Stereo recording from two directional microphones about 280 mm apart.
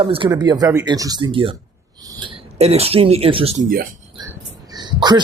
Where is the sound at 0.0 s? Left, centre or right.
Centre.